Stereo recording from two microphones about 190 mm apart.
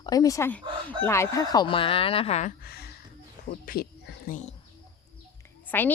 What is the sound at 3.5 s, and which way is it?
Speech, 50° left (ahead or behind).